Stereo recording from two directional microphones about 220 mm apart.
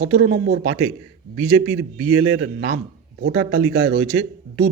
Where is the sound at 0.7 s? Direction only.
75° right (ahead or behind).